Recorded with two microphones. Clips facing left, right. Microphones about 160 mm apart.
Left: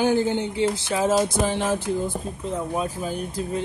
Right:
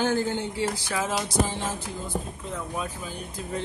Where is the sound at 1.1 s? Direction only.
40° left (ahead or behind).